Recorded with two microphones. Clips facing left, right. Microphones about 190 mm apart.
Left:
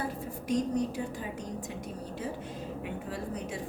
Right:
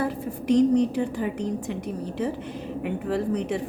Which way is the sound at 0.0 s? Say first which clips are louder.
Right 8 dB; 70° right (ahead or behind).